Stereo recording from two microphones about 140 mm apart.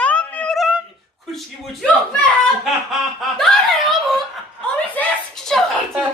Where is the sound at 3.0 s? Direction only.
Centre (ahead or behind).